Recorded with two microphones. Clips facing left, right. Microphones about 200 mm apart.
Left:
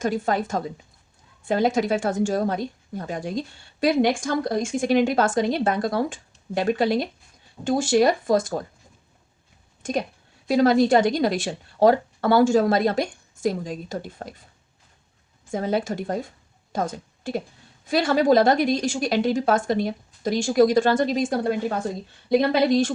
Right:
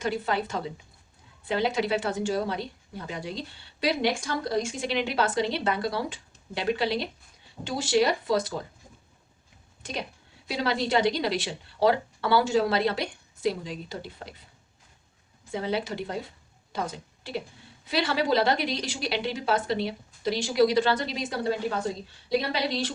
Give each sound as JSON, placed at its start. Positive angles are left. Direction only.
{"t": 0.0, "sound": "speech", "side_deg": 45}
{"t": 9.8, "sound": "speech", "side_deg": 50}
{"t": 15.5, "sound": "a woman's voice", "side_deg": 45}